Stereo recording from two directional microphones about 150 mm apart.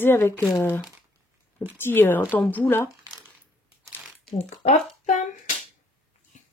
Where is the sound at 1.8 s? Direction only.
15° left (ahead or behind).